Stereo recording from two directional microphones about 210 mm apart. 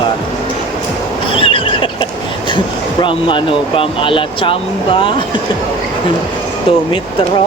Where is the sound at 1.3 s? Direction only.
25° left (ahead or behind).